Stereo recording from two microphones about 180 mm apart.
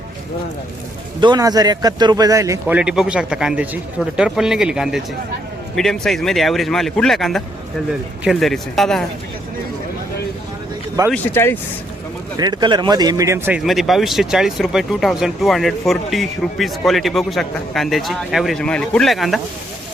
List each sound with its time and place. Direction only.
1.2 s speech: 25° right (ahead or behind)
2.7 s speech: 5° right (ahead or behind)
11.1 s speech: 10° left (ahead or behind)
12.4 s speech: 25° right (ahead or behind)
13.6 s speech: centre (ahead or behind)